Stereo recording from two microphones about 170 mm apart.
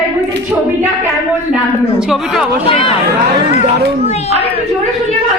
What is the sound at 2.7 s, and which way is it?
Speech, 35° left (ahead or behind).